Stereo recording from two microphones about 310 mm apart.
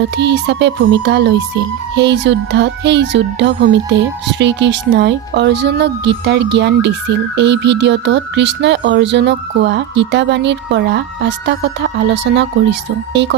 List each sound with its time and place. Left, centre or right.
0.2 s speech: right